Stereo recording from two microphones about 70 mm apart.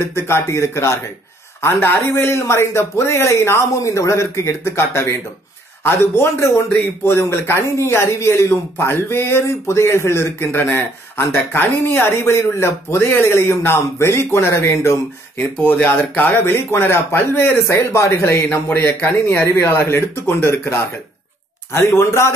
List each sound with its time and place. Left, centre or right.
0.0 s speech: left
15.5 s speech: left
17.6 s speech: left
21.7 s speech: left